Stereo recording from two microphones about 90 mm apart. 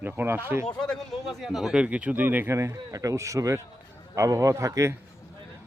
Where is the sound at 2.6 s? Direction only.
40° right (ahead or behind).